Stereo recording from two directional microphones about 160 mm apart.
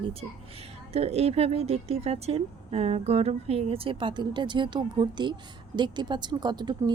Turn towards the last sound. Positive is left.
turn(degrees=-25)  # may be behind; listen again after turning